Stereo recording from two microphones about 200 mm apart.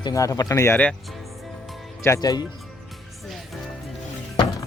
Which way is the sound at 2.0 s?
15° left (ahead or behind).